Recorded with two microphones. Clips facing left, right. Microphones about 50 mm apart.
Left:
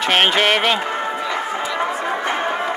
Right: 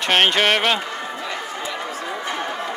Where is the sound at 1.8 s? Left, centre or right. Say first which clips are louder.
Left 7 dB; left.